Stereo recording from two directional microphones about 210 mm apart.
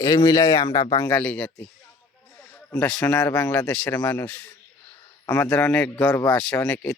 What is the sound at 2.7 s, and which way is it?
A man's voice, 5° left (ahead or behind).